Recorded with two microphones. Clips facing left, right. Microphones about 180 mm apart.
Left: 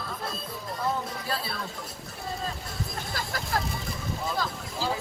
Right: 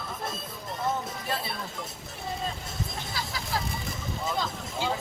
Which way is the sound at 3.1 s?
50° left (ahead or behind).